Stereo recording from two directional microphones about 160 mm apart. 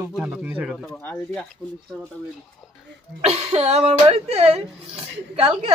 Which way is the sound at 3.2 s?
40° right (ahead or behind).